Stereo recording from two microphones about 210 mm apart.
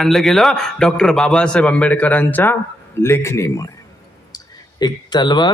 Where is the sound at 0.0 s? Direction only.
Centre (ahead or behind).